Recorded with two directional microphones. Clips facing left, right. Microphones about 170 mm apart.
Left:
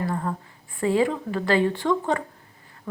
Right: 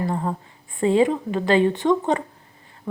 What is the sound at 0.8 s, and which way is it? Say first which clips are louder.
A woman's voice: right 4 dB; 25° right (ahead or behind).